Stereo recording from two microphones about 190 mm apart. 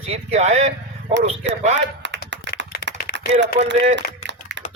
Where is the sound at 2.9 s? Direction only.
65° right (ahead or behind).